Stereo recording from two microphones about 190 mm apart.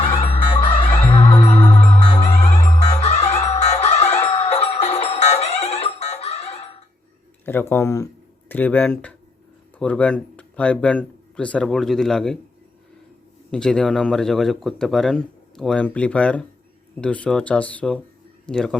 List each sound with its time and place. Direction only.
0.0 s music: 30° left (ahead or behind)
7.4 s speech: 10° left (ahead or behind)
13.5 s speech: 5° left (ahead or behind)